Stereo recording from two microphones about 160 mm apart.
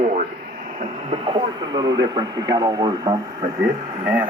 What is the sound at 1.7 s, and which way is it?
Speech, 25° right (ahead or behind).